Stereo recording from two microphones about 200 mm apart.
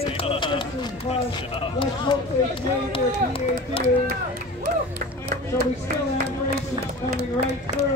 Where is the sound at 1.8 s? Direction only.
25° left (ahead or behind).